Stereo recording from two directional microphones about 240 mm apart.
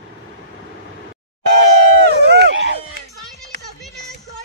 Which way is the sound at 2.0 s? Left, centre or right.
Right.